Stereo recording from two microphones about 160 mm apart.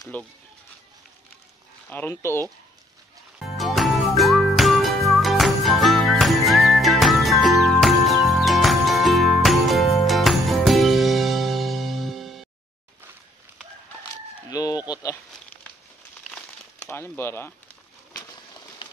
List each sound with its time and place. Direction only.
0.1 s speech: 10° left (ahead or behind)
1.9 s speech: 10° left (ahead or behind)
3.4 s music: centre (ahead or behind)
14.5 s chicken: 20° left (ahead or behind)
16.3 s crumpling: 5° left (ahead or behind)